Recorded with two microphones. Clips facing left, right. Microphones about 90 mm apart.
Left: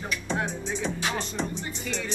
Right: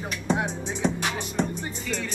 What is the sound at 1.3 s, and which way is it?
Music, 45° right (ahead or behind).